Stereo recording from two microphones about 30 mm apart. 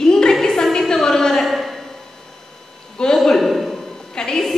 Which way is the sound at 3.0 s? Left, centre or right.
Left.